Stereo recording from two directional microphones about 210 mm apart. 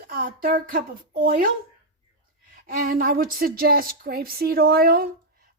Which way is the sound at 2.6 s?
45° right (ahead or behind).